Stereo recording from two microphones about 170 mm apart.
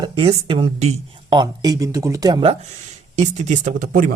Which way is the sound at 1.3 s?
25° right (ahead or behind).